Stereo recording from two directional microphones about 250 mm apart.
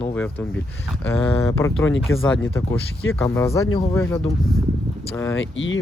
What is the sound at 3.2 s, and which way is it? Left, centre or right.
Speech, centre.